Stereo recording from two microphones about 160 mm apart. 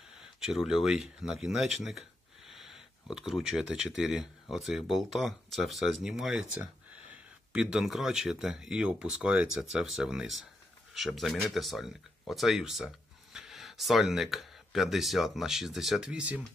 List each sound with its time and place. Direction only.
0.4 s speech: 5° right (ahead or behind)